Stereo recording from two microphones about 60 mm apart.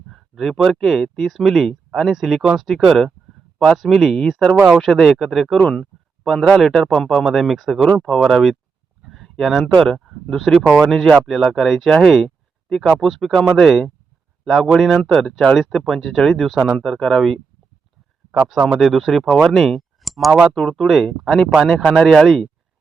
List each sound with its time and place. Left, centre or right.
0.1 s speech: centre
5.5 s speech: centre
9.0 s a sound: centre
9.7 s speech: centre
12.0 s a sound: centre
13.0 s speech: centre